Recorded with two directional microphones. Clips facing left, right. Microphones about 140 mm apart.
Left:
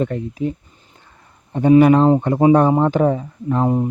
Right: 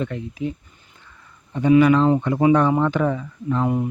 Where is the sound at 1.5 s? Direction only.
45° left (ahead or behind).